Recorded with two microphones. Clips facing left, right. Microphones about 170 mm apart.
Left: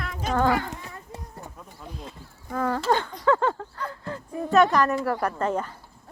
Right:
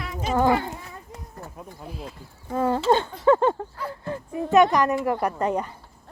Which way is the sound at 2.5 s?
25° right (ahead or behind).